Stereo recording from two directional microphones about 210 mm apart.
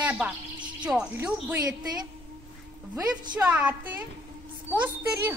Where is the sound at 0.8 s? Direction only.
5° right (ahead or behind).